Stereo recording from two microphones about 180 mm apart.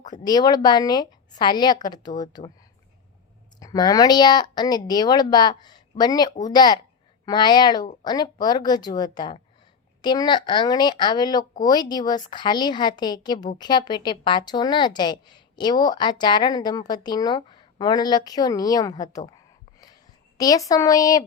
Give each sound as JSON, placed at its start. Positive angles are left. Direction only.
{"t": 0.0, "sound": "a woman's voice", "side_deg": 20}
{"t": 3.6, "sound": "a woman's voice", "side_deg": 20}
{"t": 20.4, "sound": "a woman's voice", "side_deg": 20}